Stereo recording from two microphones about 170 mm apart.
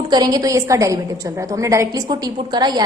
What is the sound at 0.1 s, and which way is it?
A woman's voice, 20° right (ahead or behind).